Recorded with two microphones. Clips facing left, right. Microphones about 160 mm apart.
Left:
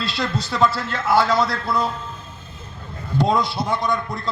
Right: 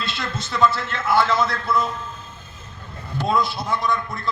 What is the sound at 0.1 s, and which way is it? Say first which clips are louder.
A man's voice: left 4 dB; 35° left (ahead or behind).